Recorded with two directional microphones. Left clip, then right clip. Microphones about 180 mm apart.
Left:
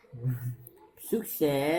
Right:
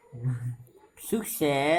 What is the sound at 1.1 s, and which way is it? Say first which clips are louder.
Speech: right 1 dB; 30° right (ahead or behind).